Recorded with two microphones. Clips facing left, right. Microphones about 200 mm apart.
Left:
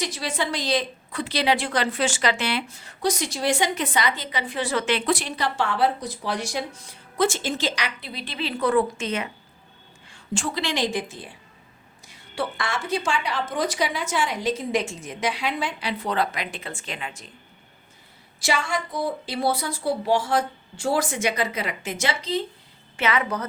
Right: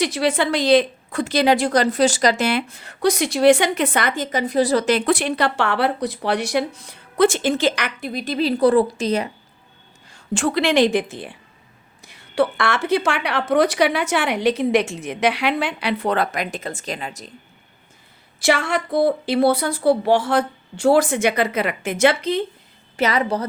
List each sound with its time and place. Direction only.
0.0 s a woman's voice: 65° right (ahead or behind); by 9.3 s 35° right (ahead or behind)
10.1 s a sound: 45° right (ahead or behind)
10.4 s a woman's voice: 60° right (ahead or behind); by 17.2 s 40° right (ahead or behind)
18.3 s a woman's voice: 65° right (ahead or behind)
23.0 s a woman's voice: 40° right (ahead or behind)